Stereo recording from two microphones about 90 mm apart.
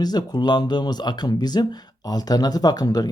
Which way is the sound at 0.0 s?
50° left (ahead or behind).